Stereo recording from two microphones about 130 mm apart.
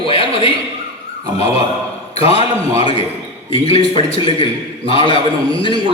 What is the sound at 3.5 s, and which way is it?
A man's voice, 45° left (ahead or behind).